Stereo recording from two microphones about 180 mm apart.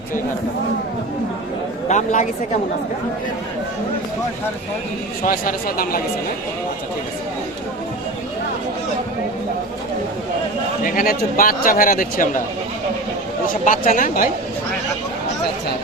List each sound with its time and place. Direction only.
1.9 s speech: 45° left (ahead or behind)
5.2 s speech: 50° left (ahead or behind)
10.8 s speech: 50° left (ahead or behind)
13.5 s speech: 45° left (ahead or behind)